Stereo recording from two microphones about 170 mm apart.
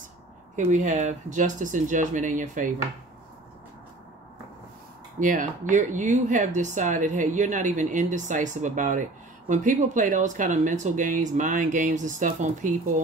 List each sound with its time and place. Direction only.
0.7 s speech: 45° right (ahead or behind)
5.2 s speech: 50° right (ahead or behind)